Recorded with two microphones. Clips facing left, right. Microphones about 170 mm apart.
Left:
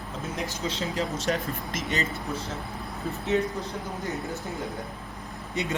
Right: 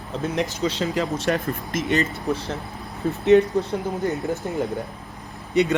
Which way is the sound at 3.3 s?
75° right (ahead or behind).